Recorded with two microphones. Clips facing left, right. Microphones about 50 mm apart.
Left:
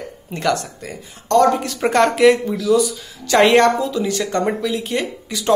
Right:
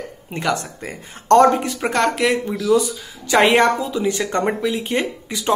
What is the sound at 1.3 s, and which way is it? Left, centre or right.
Speech, right.